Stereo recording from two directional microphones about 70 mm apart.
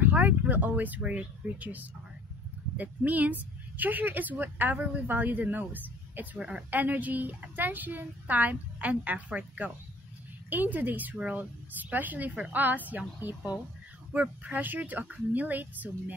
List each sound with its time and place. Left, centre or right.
0.0 s a woman's voice: right